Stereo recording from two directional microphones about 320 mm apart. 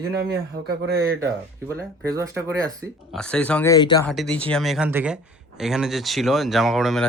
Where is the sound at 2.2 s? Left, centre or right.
Centre.